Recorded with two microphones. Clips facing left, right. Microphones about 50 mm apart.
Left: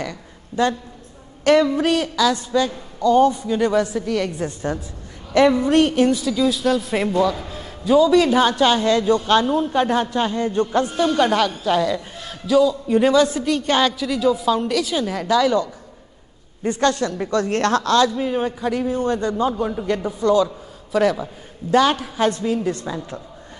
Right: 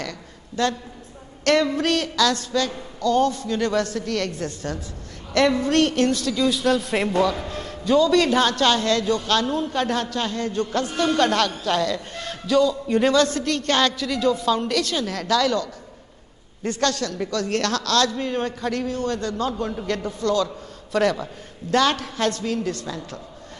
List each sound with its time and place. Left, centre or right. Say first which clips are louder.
0.6 s a man's voice: left 3 dB; centre
18.1 s a man's voice: left 3 dB; centre
20.4 s a man's voice: left 1 dB; centre; by 23.2 s left